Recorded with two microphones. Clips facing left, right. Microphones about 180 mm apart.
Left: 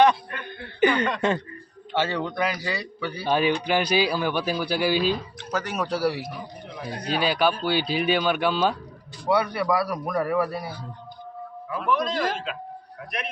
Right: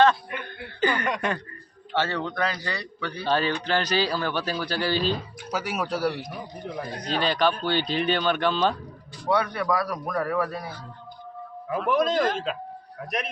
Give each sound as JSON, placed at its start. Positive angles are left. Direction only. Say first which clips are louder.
{"t": 0.3, "sound": "speech", "louder": "right 2 dB", "side_deg": -10}
{"t": 0.8, "sound": "a sound", "louder": "left 5 dB", "side_deg": 20}
{"t": 2.0, "sound": "speech", "louder": "left 1 dB", "side_deg": 15}
{"t": 5.4, "sound": "speech", "louder": "left 1 dB", "side_deg": -10}
{"t": 11.7, "sound": "a man's voice", "louder": "right 3 dB", "side_deg": -40}